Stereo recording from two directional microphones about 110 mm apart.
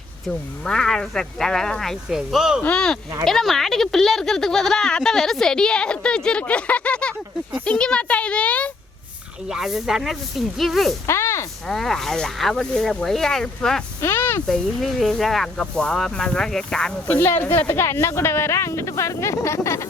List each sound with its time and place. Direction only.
0.3 s speech: 5° left (ahead or behind)
2.6 s a child's voice: 10° left (ahead or behind)
9.5 s speech: 5° right (ahead or behind)
11.0 s speech: 25° left (ahead or behind)
11.7 s speech: 5° left (ahead or behind)
14.0 s speech: 20° left (ahead or behind)
14.4 s speech: 5° left (ahead or behind)
17.1 s speech: 20° left (ahead or behind)